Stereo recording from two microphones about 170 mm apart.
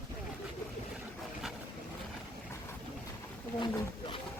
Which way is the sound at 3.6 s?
30° left (ahead or behind).